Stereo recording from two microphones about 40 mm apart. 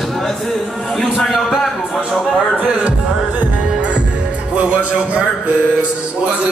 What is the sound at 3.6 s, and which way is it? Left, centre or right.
Music, right.